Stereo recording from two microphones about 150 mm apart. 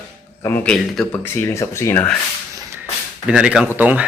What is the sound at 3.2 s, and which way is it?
Speech, 5° right (ahead or behind).